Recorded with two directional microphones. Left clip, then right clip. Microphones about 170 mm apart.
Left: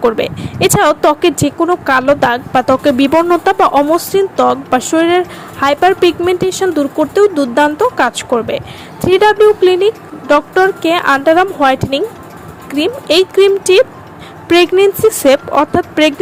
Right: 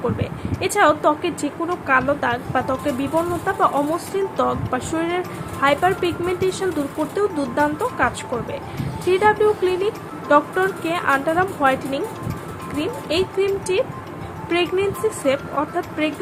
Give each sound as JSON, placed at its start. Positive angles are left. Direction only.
{"t": 0.0, "sound": "speech", "side_deg": 55}